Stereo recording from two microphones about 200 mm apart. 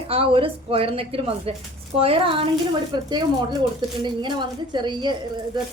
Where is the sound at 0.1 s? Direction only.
25° right (ahead or behind).